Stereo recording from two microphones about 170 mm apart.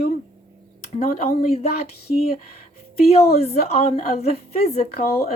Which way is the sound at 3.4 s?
35° left (ahead or behind).